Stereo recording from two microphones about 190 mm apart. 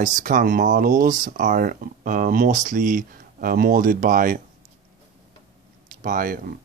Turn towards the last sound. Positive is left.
turn(degrees=-50)  # may be behind; listen again after turning